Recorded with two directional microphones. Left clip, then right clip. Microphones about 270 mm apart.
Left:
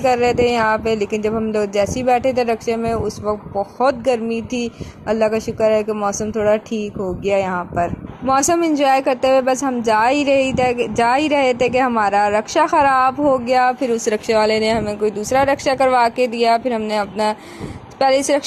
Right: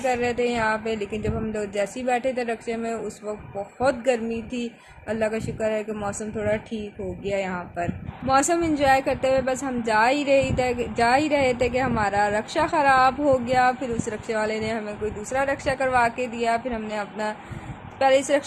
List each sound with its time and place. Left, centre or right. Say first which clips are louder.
0.0 s a woman's voice: left 8 dB; left